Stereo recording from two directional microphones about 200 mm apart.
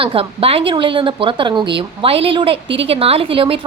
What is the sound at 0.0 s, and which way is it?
Speech, 25° right (ahead or behind).